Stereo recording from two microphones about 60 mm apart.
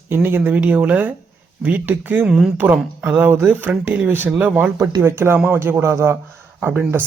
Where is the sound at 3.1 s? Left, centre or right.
Right.